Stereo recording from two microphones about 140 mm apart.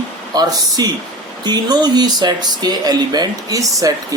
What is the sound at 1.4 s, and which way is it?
Speech, 30° right (ahead or behind).